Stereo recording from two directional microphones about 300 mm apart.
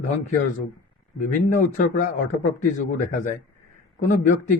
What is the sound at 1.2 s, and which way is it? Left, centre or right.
A man's voice, left.